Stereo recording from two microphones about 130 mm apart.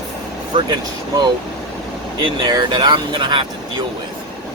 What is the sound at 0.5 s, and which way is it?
Speech, 35° right (ahead or behind).